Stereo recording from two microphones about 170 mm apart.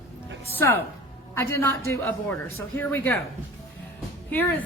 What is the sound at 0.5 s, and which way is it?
A woman's voice, 15° left (ahead or behind).